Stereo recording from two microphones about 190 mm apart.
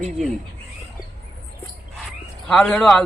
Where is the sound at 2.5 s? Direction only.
5° left (ahead or behind).